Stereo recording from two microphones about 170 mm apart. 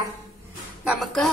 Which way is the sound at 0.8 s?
Centre (ahead or behind).